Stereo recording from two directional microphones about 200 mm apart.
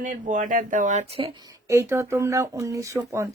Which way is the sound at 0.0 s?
40° right (ahead or behind).